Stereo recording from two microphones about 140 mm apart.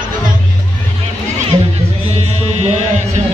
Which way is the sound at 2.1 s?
55° right (ahead or behind).